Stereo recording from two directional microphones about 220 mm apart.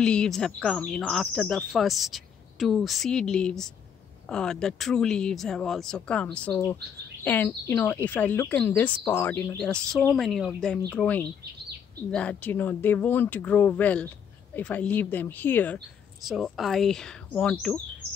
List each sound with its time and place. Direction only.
0.0 s speech: 5° left (ahead or behind)